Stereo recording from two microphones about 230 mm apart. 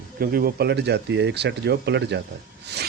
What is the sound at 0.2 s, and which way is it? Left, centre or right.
Speech, right.